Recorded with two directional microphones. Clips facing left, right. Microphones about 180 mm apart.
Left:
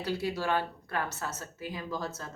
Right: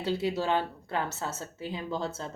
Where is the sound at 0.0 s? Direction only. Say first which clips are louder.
Right 3 dB; 25° right (ahead or behind).